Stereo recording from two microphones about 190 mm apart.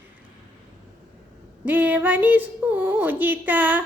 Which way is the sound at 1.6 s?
10° right (ahead or behind).